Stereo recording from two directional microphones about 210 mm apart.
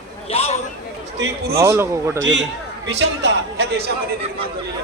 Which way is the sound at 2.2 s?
60° right (ahead or behind).